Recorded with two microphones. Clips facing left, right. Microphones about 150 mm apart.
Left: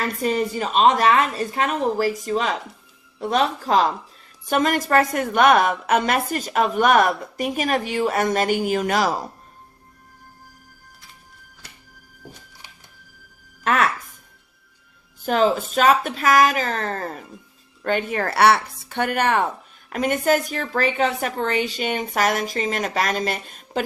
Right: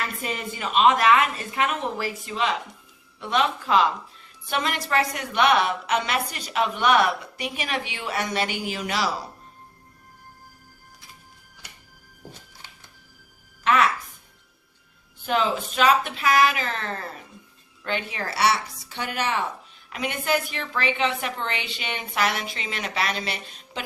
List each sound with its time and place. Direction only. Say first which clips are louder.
0.0 s a woman's voice: left 8 dB; 40° left (ahead or behind)
13.7 s music: even; 45° left (ahead or behind)
15.2 s a woman's voice: left 5 dB; 40° left (ahead or behind)